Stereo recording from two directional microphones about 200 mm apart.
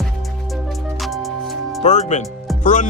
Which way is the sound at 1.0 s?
Centre (ahead or behind).